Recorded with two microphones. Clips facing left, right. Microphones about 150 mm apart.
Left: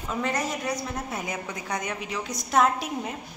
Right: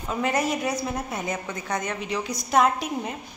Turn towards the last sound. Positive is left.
turn(degrees=0)  # may be behind; listen again after turning